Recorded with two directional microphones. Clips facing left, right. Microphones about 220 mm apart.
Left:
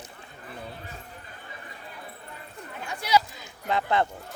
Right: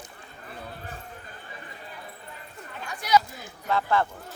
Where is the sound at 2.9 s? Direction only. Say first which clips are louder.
Right 1 dB; 25° left (ahead or behind).